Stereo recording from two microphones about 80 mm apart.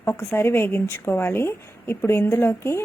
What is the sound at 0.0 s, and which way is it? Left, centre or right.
A woman's voice, left.